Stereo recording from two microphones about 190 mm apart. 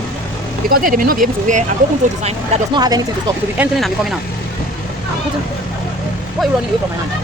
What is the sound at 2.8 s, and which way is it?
Speech, 20° right (ahead or behind).